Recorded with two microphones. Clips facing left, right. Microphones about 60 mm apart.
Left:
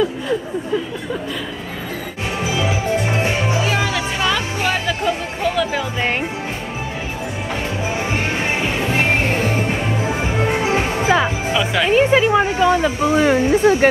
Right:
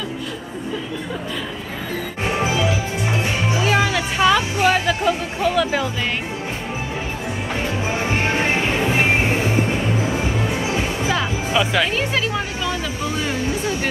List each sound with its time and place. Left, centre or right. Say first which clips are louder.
3.1 s music: left 2 dB; left
3.6 s music: right 1 dB; centre
8.6 s music: even; centre
9.2 s music: even; left
11.1 s music: left 7 dB; centre
11.5 s speech: right 1 dB; centre
11.9 s speech: left 8 dB; left